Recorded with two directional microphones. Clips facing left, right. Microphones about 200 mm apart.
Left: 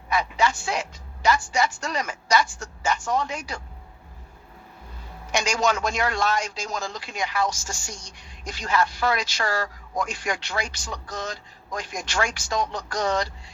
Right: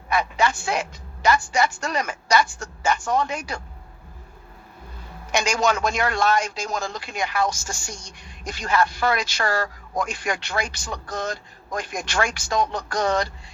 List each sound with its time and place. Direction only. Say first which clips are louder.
0.1 s a man's voice: right 1 dB; 55° right (ahead or behind)
5.3 s a man's voice: right 2 dB; 55° right (ahead or behind)